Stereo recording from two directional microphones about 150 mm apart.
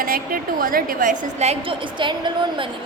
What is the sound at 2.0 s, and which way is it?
Speech, 30° right (ahead or behind).